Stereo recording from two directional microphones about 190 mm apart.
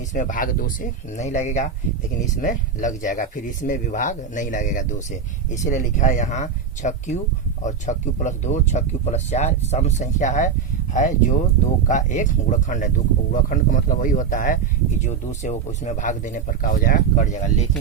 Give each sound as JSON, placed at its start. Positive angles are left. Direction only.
{"t": 0.1, "sound": "speech", "side_deg": 45}